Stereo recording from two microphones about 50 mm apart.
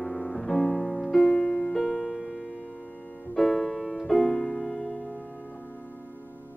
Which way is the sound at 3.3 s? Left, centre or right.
Centre.